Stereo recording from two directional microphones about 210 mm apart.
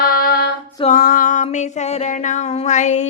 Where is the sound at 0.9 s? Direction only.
40° left (ahead or behind).